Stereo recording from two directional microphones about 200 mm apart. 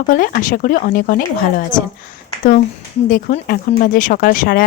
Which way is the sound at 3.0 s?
40° left (ahead or behind).